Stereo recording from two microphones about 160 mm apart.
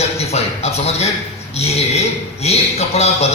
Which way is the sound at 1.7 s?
40° left (ahead or behind).